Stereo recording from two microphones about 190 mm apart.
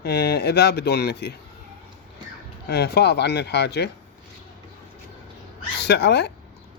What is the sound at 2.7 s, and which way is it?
A man's voice, 60° left (ahead or behind).